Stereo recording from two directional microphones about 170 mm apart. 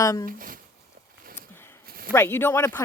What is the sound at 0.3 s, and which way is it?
Speech, 55° right (ahead or behind).